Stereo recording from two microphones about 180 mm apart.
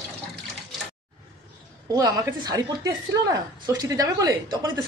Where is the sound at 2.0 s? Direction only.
20° right (ahead or behind).